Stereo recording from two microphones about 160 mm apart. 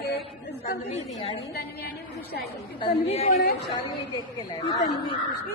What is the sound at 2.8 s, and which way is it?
Speech, 40° left (ahead or behind).